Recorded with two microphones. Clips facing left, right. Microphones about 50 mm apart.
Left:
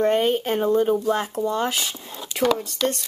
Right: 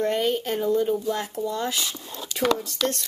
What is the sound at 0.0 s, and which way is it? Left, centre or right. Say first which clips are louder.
Speech: left 4 dB; left.